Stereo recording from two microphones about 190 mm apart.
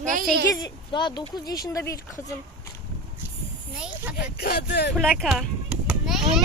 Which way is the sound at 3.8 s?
5° right (ahead or behind).